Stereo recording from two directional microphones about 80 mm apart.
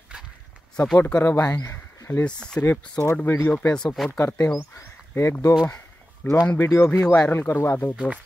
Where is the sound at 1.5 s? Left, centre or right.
Left.